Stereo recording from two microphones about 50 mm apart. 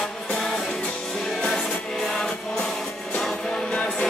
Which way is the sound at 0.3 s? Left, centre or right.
Centre.